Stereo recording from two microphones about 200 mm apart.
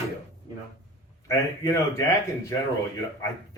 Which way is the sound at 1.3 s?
15° left (ahead or behind).